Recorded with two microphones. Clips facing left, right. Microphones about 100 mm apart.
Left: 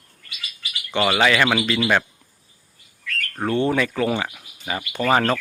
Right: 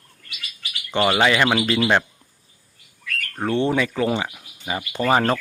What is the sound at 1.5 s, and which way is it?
Speech, 35° right (ahead or behind).